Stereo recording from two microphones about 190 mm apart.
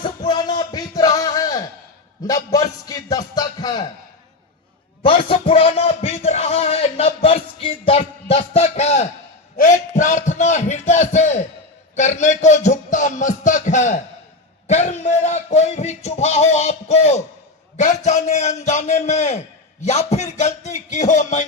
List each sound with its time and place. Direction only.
0.0 s music: 20° left (ahead or behind)
2.2 s a man's voice: 20° left (ahead or behind)
2.8 s music: 20° left (ahead or behind)
5.0 s music: 30° left (ahead or behind)
9.6 s a sound: 40° left (ahead or behind)
11.9 s music: 40° left (ahead or behind)
14.7 s a sound: 35° left (ahead or behind)